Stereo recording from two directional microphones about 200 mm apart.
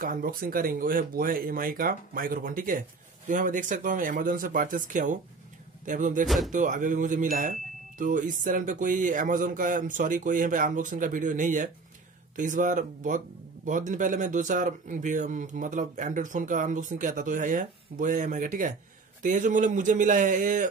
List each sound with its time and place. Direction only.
0.0 s speech: 45° right (ahead or behind)
6.2 s speech: centre (ahead or behind)
6.5 s speech: 40° right (ahead or behind)